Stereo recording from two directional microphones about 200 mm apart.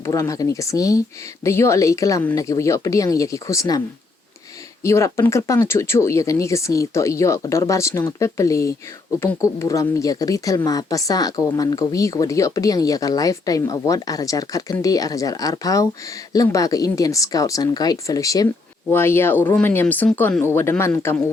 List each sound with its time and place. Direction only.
0.0 s speech: 15° left (ahead or behind)